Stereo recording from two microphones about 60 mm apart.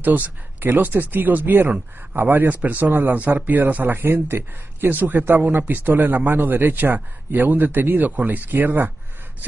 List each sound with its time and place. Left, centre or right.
0.0 s speech: right